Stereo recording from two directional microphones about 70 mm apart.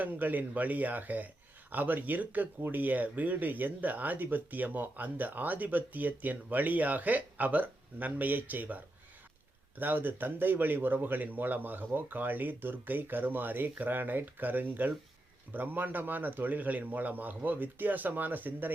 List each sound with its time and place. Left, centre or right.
0.0 s speech: right